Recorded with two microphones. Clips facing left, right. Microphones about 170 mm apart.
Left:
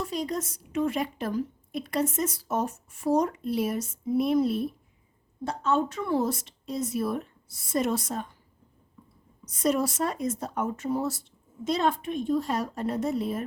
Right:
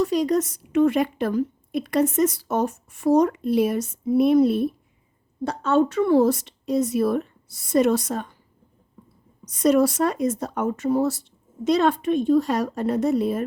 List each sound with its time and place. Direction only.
0.0 s a woman's voice: 80° right
5.5 s a woman's voice: 80° right
9.4 s a woman's voice: 75° right (ahead or behind)